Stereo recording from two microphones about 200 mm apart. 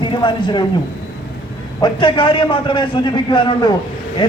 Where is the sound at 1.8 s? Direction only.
25° left (ahead or behind).